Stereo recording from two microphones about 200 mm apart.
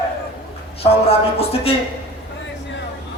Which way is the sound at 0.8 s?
30° left (ahead or behind).